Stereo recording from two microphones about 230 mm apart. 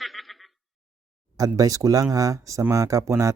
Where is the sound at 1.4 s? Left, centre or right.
Centre.